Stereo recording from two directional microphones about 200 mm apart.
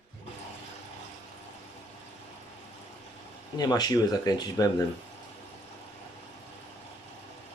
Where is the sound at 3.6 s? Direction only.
20° left (ahead or behind).